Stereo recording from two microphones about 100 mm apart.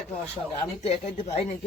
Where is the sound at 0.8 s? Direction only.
90° left.